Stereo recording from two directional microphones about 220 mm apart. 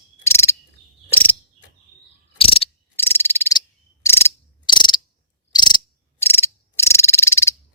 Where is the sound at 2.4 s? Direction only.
25° left (ahead or behind).